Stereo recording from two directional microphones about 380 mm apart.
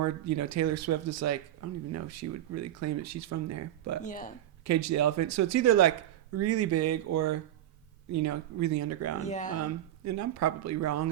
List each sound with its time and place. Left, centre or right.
0.0 s speech: right
4.0 s speech: left
4.6 s speech: right
9.1 s speech: centre
9.6 s speech: right